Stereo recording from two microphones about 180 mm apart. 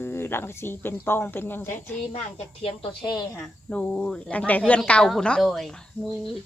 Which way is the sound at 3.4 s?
10° left (ahead or behind).